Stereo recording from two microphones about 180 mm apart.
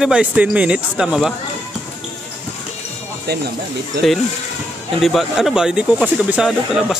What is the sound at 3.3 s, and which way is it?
Speech, 65° right (ahead or behind).